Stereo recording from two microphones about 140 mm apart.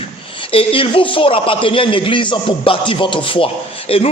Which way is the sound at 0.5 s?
40° left (ahead or behind).